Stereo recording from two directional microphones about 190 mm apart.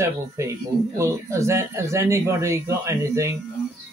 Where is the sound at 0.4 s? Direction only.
15° right (ahead or behind).